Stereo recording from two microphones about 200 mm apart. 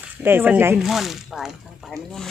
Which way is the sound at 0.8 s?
Centre (ahead or behind).